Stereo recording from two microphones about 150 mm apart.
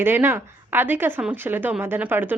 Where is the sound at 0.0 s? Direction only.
15° right (ahead or behind).